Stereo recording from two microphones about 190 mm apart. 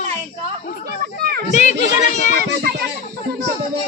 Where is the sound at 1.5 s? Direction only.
40° left (ahead or behind).